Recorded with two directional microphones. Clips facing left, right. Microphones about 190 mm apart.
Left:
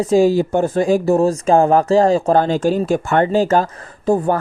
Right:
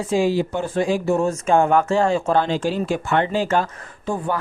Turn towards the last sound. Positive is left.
turn(degrees=40)  # may be behind; listen again after turning